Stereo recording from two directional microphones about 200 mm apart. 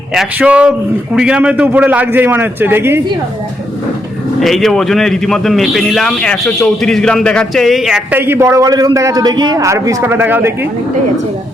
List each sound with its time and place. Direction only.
0.1 s a man's voice: 5° right (ahead or behind)
4.4 s a man's voice: centre (ahead or behind)